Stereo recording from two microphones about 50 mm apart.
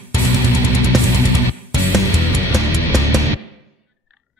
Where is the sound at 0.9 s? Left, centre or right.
Centre.